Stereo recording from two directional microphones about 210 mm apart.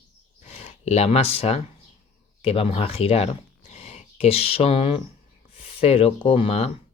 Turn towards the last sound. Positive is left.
turn(degrees=30)  # may be behind; listen again after turning